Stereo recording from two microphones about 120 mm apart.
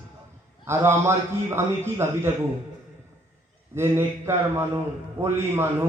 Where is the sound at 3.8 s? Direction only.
20° right (ahead or behind).